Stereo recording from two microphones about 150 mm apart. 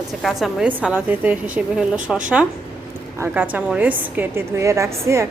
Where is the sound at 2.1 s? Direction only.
Centre (ahead or behind).